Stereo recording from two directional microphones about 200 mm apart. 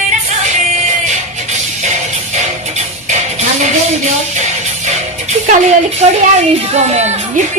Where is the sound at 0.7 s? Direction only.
35° right (ahead or behind).